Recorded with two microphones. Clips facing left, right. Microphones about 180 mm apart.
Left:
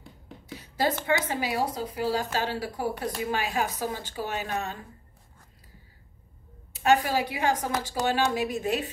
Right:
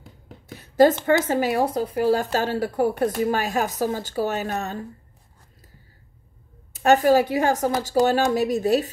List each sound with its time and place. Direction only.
0.5 s a sound: 50° right (ahead or behind)
1.0 s speech: 50° right (ahead or behind)
6.7 s speech: 45° right (ahead or behind)